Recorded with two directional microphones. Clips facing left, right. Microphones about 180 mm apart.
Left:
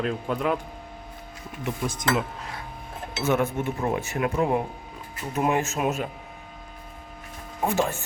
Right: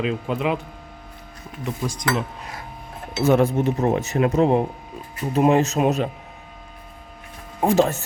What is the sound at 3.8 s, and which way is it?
Speech, 25° right (ahead or behind).